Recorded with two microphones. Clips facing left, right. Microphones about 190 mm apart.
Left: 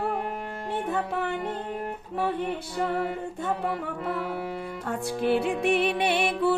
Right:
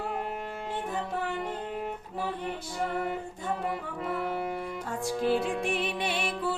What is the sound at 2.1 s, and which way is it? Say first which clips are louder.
Music: left 7 dB; 65° left (ahead or behind).